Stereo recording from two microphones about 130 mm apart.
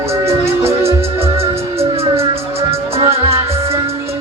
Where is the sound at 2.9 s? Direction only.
50° right (ahead or behind).